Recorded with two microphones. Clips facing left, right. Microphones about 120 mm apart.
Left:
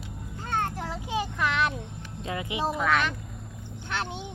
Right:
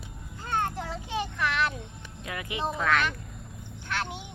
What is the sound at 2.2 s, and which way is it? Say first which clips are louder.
Speech: left 3 dB; 25° left (ahead or behind).